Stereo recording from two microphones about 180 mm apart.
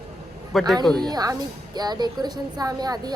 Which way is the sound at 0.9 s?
20° right (ahead or behind).